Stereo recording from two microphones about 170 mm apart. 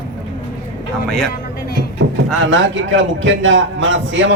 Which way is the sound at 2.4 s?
90° right.